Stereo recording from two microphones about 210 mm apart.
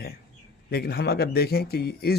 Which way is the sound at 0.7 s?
50° left (ahead or behind).